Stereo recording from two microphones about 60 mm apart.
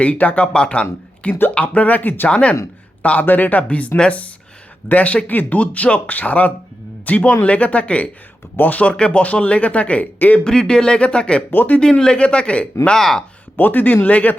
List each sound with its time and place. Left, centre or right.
0.0 s speech: left
2.3 s a man's voice: left
10.4 s speech: centre
11.5 s speech: left
11.8 s speech: centre
13.0 s speech: centre
13.6 s speech: left